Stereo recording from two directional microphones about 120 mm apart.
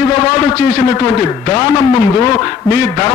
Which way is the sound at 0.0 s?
30° left (ahead or behind).